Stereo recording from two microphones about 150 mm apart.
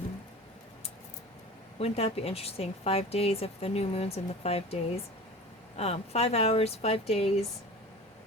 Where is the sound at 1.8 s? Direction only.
45° left (ahead or behind).